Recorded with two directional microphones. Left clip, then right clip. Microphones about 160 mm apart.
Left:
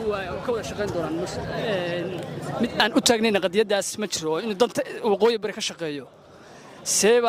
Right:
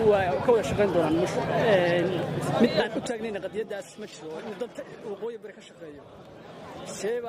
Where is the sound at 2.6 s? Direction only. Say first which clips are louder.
Right 5 dB; 45° left (ahead or behind).